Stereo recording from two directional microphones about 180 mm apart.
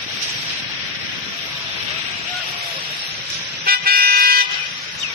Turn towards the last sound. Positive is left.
turn(degrees=-55)  # may be behind; listen again after turning